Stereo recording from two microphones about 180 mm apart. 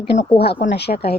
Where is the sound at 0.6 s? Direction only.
65° left (ahead or behind).